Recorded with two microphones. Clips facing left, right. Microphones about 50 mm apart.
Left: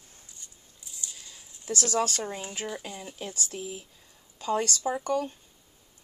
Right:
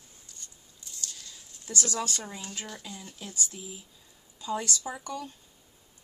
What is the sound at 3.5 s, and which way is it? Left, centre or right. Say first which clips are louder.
A woman's voice: left 7 dB; left.